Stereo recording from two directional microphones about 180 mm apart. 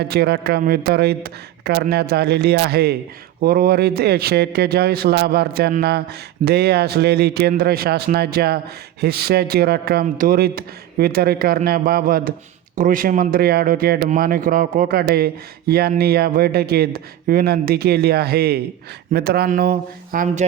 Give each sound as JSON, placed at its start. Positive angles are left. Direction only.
{"t": 0.0, "sound": "speech", "side_deg": -60}